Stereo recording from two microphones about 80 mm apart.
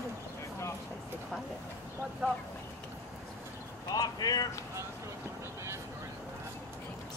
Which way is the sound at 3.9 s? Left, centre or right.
Left.